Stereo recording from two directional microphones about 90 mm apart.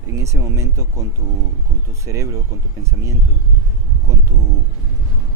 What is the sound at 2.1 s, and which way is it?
Speech, 35° right (ahead or behind).